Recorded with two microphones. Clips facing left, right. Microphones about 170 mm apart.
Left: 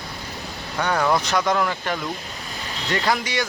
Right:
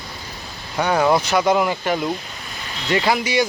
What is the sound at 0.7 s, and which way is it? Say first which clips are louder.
Speech: right 4 dB; 10° right (ahead or behind).